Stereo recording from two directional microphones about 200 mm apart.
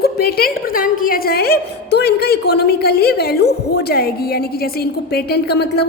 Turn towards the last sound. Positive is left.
turn(degrees=55)  # may be behind; listen again after turning